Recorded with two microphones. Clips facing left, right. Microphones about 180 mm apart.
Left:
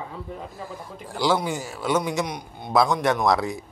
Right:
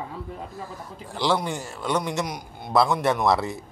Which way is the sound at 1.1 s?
Centre (ahead or behind).